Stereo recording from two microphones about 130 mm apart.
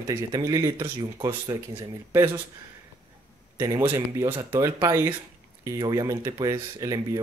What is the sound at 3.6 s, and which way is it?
Speech, 20° right (ahead or behind).